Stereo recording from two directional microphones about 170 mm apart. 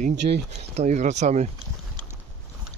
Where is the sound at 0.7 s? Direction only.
40° right (ahead or behind).